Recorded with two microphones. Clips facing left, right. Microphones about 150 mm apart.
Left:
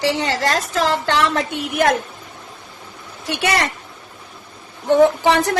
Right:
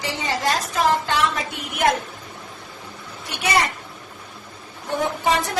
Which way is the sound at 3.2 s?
75° left (ahead or behind).